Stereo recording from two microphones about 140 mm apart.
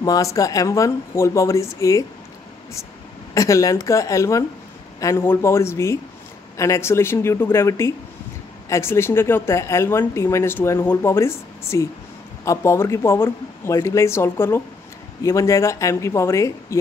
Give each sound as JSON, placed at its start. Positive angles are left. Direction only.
{"t": 0.0, "sound": "speech", "side_deg": 25}
{"t": 3.3, "sound": "speech", "side_deg": 20}